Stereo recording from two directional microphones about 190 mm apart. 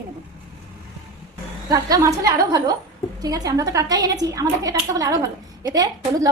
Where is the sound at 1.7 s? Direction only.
15° right (ahead or behind).